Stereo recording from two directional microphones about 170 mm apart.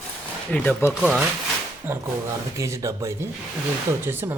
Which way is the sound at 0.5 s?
10° left (ahead or behind).